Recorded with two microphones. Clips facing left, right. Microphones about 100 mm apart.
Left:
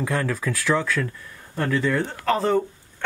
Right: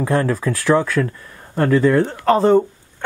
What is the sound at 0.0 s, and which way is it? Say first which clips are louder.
Speech: right 6 dB; 35° right (ahead or behind).